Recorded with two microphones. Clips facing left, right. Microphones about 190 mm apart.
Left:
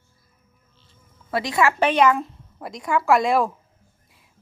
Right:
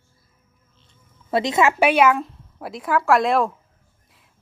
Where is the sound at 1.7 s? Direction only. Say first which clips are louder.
Right 1 dB; 10° right (ahead or behind).